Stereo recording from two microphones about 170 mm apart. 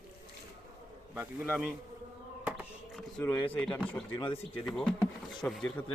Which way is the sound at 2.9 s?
10° left (ahead or behind).